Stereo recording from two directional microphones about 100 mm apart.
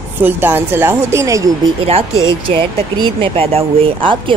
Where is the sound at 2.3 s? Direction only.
55° right (ahead or behind).